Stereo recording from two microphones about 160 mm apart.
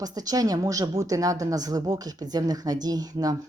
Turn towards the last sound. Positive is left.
turn(degrees=-25)  # may be behind; listen again after turning